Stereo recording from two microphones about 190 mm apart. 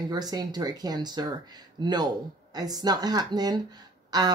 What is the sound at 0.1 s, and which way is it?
Speech, 20° right (ahead or behind).